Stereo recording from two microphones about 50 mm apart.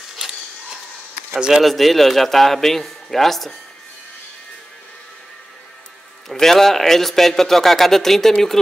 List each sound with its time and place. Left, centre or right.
1.6 s a man's voice: centre
6.2 s a man's voice: centre